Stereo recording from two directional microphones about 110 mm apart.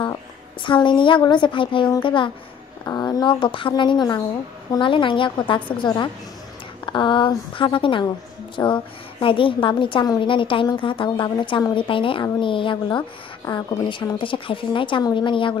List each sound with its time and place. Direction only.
0.0 s a woman's voice: 45° left (ahead or behind)
2.8 s a woman's voice: 35° left (ahead or behind); by 15.5 s 50° left (ahead or behind)